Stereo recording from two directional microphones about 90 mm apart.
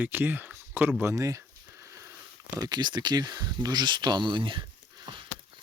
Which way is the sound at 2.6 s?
50° right (ahead or behind).